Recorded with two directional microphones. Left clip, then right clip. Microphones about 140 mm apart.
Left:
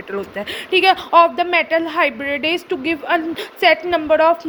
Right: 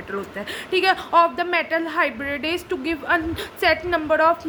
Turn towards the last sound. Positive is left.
turn(degrees=15)  # may be behind; listen again after turning